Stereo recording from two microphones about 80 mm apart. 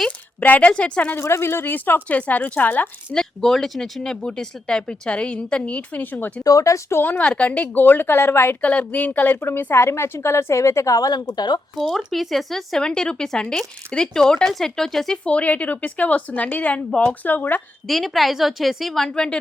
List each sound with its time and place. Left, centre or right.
0.3 s speech: centre
1.1 s speech: left
3.1 s speech: centre; by 6.4 s left
6.4 s a woman's voice: left
7.0 s speech: left
8.6 s a woman's voice: centre; by 11.6 s left
11.8 s speech: centre; by 17.6 s left
17.8 s a woman's voice: centre